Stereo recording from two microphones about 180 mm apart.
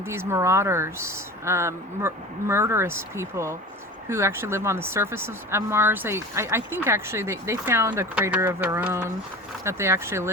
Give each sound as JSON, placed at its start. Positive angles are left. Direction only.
{"t": 0.0, "sound": "speech", "side_deg": -15}